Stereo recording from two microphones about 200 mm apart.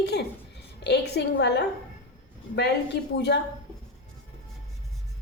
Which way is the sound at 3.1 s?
60° left (ahead or behind).